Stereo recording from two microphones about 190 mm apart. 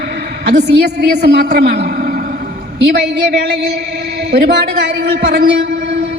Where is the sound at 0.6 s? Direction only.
60° right (ahead or behind).